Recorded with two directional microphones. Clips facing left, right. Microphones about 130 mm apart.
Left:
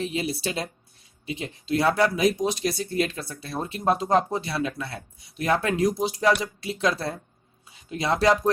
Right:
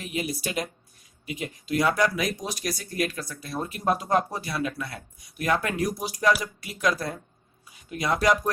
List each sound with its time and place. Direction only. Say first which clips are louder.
0.0 s speech: left 3 dB; 30° left (ahead or behind)